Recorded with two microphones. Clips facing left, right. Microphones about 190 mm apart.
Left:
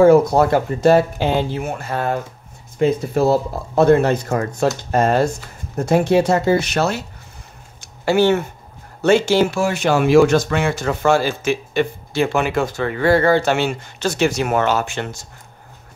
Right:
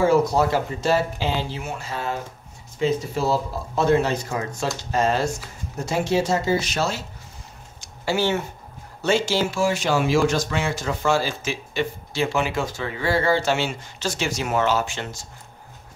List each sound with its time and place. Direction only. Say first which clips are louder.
0.0 s speech: left 7 dB; 55° left (ahead or behind)
7.8 s a sound: left 7 dB; 55° left (ahead or behind)
9.0 s speech: left 7 dB; 60° left (ahead or behind)